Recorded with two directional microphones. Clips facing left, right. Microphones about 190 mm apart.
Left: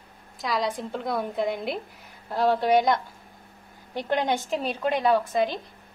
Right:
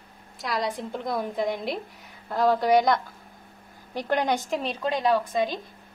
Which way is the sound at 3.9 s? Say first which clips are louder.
Even; 20° left (ahead or behind).